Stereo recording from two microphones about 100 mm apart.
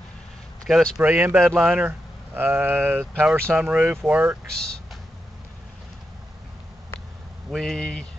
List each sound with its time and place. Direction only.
0.7 s speech: centre (ahead or behind)
1.0 s speech: 15° right (ahead or behind)
1.4 s speech: 5° right (ahead or behind)
1.9 s speech: 20° right (ahead or behind)
3.6 s speech: 5° right (ahead or behind)
7.5 s speech: 5° left (ahead or behind)